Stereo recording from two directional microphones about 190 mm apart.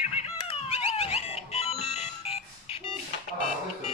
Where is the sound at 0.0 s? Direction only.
30° left (ahead or behind).